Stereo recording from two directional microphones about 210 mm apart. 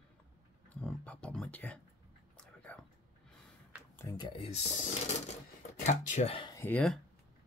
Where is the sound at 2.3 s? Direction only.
5° left (ahead or behind).